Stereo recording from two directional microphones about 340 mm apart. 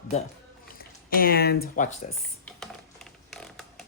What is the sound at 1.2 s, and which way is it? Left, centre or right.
Speech, left.